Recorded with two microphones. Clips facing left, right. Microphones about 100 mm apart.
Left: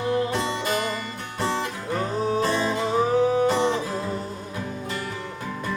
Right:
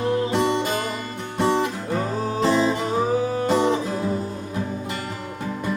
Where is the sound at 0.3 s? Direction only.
20° right (ahead or behind).